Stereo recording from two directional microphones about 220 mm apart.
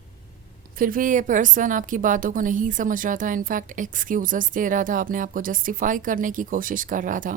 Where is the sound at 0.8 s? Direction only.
40° right (ahead or behind).